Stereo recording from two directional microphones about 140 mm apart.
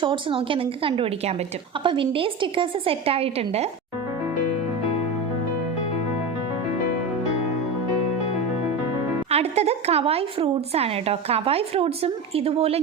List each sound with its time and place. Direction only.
0.0 s a woman's voice: 40° right (ahead or behind)
9.3 s a woman's voice: 50° right (ahead or behind)